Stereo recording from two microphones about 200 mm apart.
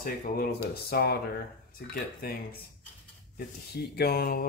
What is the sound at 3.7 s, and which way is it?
Speech, 50° left (ahead or behind).